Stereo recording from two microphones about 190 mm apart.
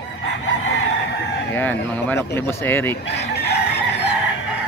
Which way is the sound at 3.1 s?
60° left (ahead or behind).